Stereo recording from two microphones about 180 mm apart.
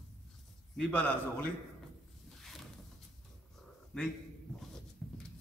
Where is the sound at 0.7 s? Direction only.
5° left (ahead or behind).